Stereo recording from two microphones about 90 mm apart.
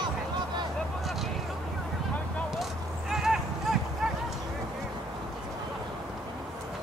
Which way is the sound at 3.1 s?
5° right (ahead or behind).